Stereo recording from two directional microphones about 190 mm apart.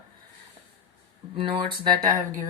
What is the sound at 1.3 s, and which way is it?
Speech, 25° right (ahead or behind).